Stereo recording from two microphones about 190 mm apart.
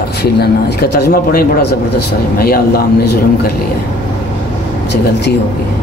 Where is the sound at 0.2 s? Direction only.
60° left (ahead or behind).